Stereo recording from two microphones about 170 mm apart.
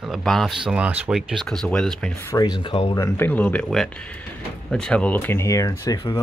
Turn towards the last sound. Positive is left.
turn(degrees=20)  # may be behind; listen again after turning